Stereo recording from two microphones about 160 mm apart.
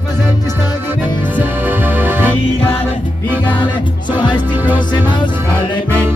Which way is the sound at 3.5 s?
30° left (ahead or behind).